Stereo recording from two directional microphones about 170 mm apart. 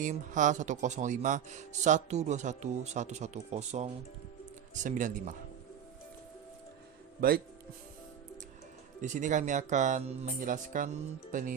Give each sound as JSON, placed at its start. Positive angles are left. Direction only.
{"t": 0.0, "sound": "speech", "side_deg": -50}
{"t": 7.2, "sound": "speech", "side_deg": -60}
{"t": 9.0, "sound": "speech", "side_deg": -50}